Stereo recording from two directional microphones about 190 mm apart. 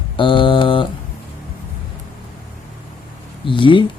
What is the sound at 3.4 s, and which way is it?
Speech, 25° left (ahead or behind).